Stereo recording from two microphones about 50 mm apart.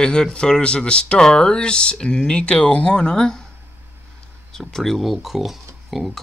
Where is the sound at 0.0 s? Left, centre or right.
Centre.